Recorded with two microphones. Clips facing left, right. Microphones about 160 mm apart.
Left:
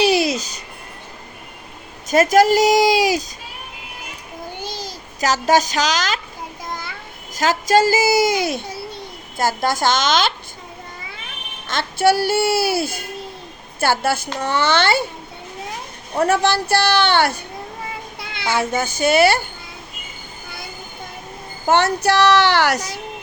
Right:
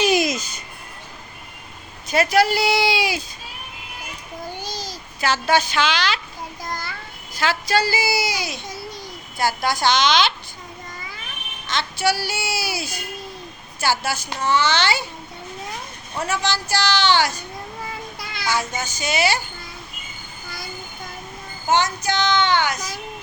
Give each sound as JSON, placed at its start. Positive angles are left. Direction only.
{"t": 0.0, "sound": "music", "side_deg": 35}
{"t": 2.0, "sound": "a woman's voice", "side_deg": 45}
{"t": 4.6, "sound": "a sound", "side_deg": 20}
{"t": 5.2, "sound": "a woman's voice", "side_deg": 40}
{"t": 7.3, "sound": "a woman's voice", "side_deg": 45}
{"t": 8.6, "sound": "babbling", "side_deg": 30}
{"t": 9.4, "sound": "a woman's voice", "side_deg": 45}
{"t": 11.7, "sound": "a child's voice", "side_deg": 50}
{"t": 16.1, "sound": "a child's voice", "side_deg": 60}
{"t": 18.2, "sound": "a sound", "side_deg": 25}
{"t": 18.6, "sound": "a child's voice", "side_deg": 55}
{"t": 21.7, "sound": "a child's voice", "side_deg": 65}